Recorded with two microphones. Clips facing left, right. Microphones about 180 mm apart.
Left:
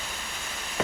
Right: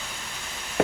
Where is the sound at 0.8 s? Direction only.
60° right (ahead or behind).